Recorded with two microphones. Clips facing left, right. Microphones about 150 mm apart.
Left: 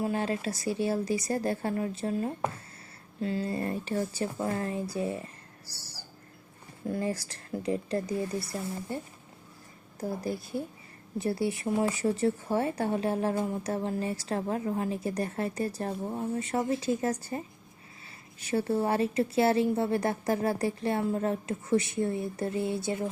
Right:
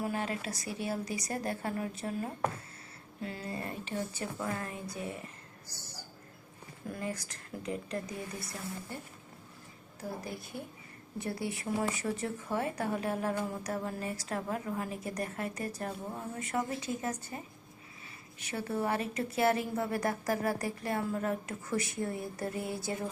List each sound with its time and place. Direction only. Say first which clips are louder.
0.0 s speech: left 5 dB; 30° left (ahead or behind)
5.6 s a sound: right 1 dB; 30° left (ahead or behind)
6.8 s speech: left 7 dB; 30° left (ahead or behind)
11.2 s speech: left 7 dB; 30° left (ahead or behind)